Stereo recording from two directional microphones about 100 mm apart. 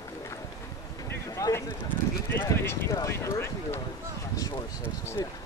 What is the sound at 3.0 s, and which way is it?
Clip-clop, 25° left (ahead or behind).